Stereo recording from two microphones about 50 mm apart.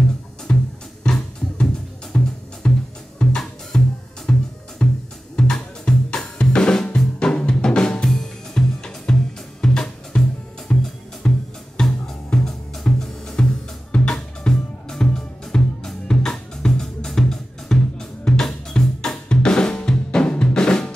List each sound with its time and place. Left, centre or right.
0.5 s music: centre
5.3 s drum kit: centre
9.6 s music: centre